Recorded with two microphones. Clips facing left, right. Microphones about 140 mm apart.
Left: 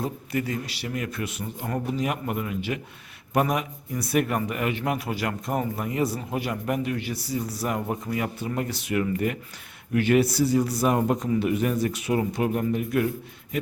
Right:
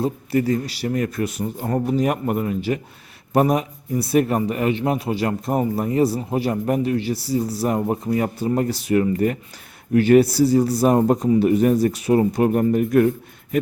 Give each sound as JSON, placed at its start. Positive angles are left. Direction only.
{"t": 0.0, "sound": "speech", "side_deg": -35}